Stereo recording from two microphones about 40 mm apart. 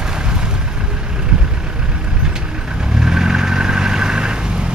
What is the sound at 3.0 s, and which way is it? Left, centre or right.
Vehicle, centre.